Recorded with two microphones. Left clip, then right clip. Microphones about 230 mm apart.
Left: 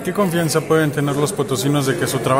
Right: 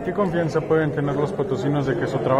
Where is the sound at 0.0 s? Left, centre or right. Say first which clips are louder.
Left 3 dB; left.